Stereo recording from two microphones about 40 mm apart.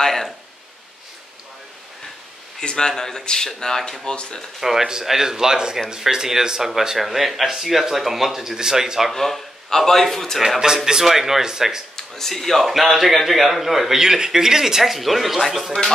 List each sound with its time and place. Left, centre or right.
0.0 s a sound: centre
2.6 s speech: centre
4.6 s speech: centre
9.1 s speech: centre
10.6 s speech: centre
11.1 s speech: centre
12.0 s a man's voice: centre